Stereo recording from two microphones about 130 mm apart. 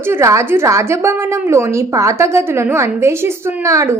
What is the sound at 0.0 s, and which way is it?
A woman's voice, 20° right (ahead or behind).